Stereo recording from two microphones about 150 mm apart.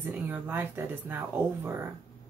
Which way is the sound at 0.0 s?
15° right (ahead or behind).